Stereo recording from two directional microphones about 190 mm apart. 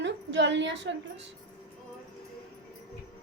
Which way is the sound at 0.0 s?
70° right (ahead or behind).